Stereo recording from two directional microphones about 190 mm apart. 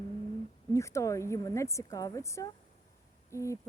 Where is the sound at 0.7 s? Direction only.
15° left (ahead or behind).